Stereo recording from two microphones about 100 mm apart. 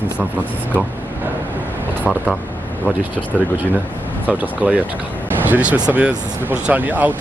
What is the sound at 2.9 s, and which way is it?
Speech, 20° right (ahead or behind).